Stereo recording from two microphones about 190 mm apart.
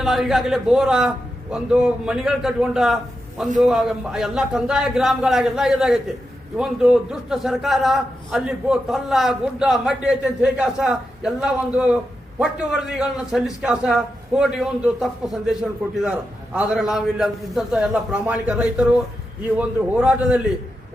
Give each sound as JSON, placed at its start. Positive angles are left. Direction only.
{"t": 0.0, "sound": "a man's voice", "side_deg": 0}
{"t": 16.6, "sound": "a man's voice", "side_deg": -5}